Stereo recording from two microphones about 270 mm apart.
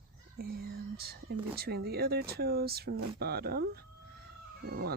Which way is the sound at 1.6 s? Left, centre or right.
Right.